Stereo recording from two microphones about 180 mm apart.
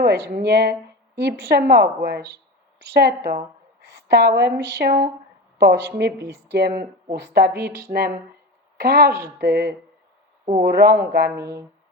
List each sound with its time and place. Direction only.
0.0 s a woman's voice: 65° right (ahead or behind)
7.9 s speech: 30° right (ahead or behind)
8.8 s a woman's voice: 65° right (ahead or behind)
11.3 s speech: 15° right (ahead or behind)